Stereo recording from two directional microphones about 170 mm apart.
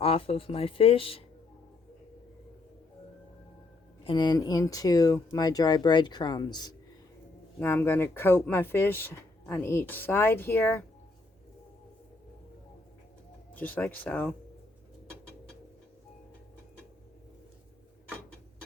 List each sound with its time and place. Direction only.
0.0 s speech: 35° left (ahead or behind)
4.0 s speech: 25° left (ahead or behind)
7.6 s speech: 15° left (ahead or behind)
13.5 s speech: 10° left (ahead or behind)